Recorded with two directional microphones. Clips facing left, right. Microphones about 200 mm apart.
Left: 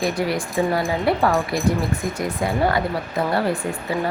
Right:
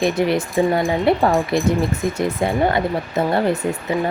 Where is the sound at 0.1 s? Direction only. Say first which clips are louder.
Right 4 dB; 25° right (ahead or behind).